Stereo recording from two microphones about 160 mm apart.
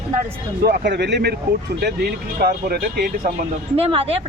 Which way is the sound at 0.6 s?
85° right.